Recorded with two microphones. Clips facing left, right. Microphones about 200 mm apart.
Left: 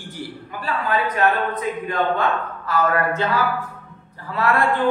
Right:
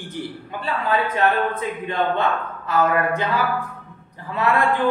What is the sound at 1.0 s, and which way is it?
Speech, 25° right (ahead or behind).